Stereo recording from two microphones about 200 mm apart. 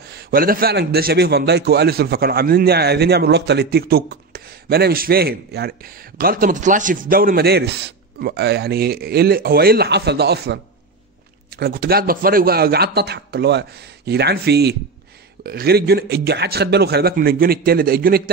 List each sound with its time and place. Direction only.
0.0 s a man's voice: 50° right (ahead or behind)